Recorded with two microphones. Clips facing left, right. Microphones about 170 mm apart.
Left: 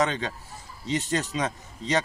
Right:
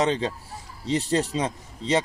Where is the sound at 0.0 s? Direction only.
30° right (ahead or behind).